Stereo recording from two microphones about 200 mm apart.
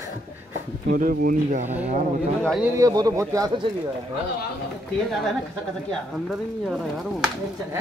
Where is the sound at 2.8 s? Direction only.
20° right (ahead or behind).